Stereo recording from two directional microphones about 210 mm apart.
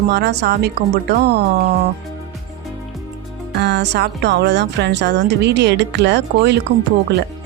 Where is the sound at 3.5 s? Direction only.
55° right (ahead or behind).